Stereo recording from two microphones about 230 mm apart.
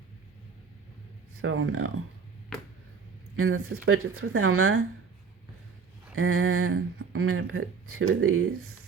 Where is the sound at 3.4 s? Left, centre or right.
Right.